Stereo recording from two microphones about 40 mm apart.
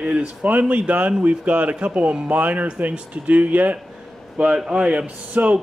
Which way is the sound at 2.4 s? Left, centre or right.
Right.